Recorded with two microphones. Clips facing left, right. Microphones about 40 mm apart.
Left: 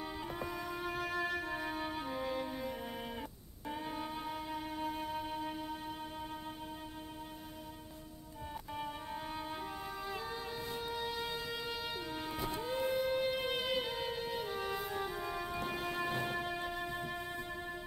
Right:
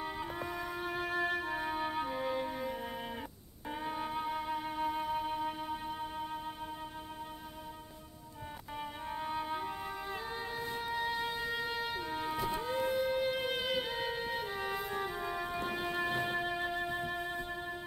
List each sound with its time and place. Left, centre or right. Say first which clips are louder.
0.0 s music: right 2 dB; centre
8.7 s music: right 3 dB; centre
10.8 s music: right 5 dB; centre
13.9 s music: right 2 dB; centre
16.1 s music: right 3 dB; right
16.3 s music: right 4 dB; centre